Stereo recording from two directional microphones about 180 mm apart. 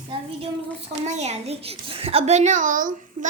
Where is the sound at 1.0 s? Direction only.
40° right (ahead or behind).